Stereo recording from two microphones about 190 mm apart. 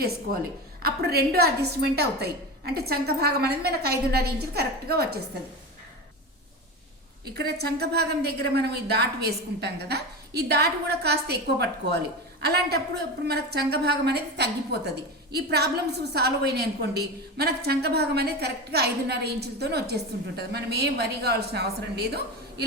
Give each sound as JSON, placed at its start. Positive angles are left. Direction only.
{"t": 0.8, "sound": "a woman's voice", "side_deg": -55}
{"t": 7.3, "sound": "a woman's voice", "side_deg": -55}